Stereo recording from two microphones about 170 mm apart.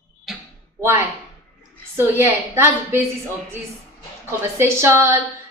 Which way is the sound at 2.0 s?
15° right (ahead or behind).